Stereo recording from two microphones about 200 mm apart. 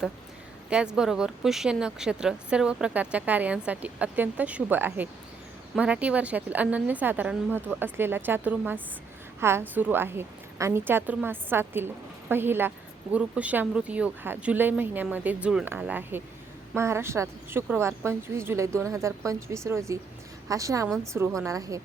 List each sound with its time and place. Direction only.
0.7 s a woman's voice: 5° right (ahead or behind)